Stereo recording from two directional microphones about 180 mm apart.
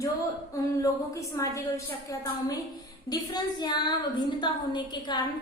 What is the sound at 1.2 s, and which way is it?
Speech, 15° left (ahead or behind).